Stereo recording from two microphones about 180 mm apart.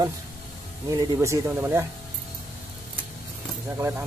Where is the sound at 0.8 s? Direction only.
20° right (ahead or behind).